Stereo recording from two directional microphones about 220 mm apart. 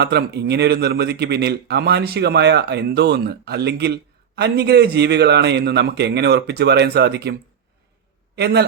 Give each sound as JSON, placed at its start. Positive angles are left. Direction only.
{"t": 0.0, "sound": "a man's voice", "side_deg": -50}
{"t": 8.4, "sound": "a man's voice", "side_deg": -45}